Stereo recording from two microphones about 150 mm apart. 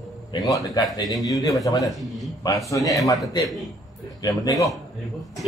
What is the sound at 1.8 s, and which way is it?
Speech, centre (ahead or behind).